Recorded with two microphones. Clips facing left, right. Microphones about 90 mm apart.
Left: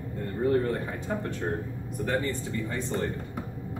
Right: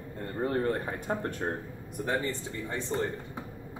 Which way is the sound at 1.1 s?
40° right (ahead or behind).